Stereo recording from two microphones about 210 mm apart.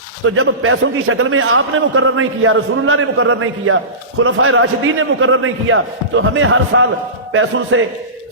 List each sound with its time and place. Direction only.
0.3 s a man's voice: 75° right (ahead or behind)